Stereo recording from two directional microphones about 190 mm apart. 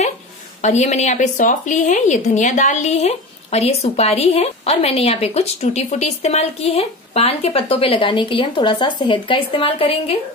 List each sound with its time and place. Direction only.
0.6 s a woman's voice: 40° left (ahead or behind)